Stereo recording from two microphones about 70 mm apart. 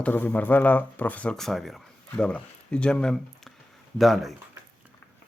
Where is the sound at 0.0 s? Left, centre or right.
Left.